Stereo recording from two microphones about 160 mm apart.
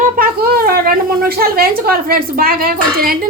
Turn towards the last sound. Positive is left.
turn(degrees=-70)  # may be behind; listen again after turning